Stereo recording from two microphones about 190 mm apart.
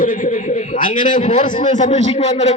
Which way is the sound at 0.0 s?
45° left (ahead or behind).